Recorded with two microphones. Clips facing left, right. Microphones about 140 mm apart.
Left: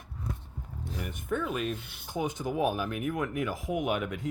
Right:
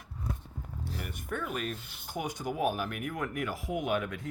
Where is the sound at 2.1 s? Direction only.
20° left (ahead or behind).